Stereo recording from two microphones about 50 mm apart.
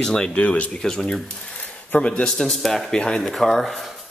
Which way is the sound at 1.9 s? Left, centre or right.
Left.